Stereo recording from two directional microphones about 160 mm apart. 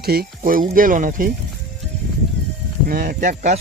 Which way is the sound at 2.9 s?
65° right (ahead or behind).